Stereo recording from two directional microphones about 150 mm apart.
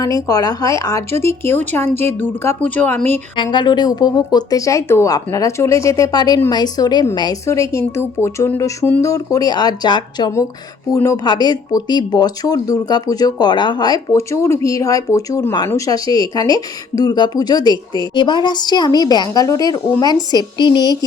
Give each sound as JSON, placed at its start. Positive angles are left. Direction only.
{"t": 0.0, "sound": "speech", "side_deg": 25}
{"t": 3.3, "sound": "speech", "side_deg": 30}